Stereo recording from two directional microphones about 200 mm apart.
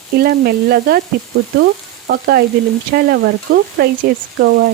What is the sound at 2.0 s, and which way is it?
Speech, 50° right (ahead or behind).